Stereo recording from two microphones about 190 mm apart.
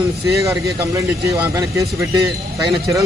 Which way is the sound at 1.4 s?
15° right (ahead or behind).